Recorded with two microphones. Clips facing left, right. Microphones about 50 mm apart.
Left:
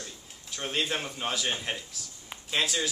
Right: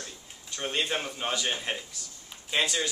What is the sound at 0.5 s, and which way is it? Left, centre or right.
A man's voice, centre.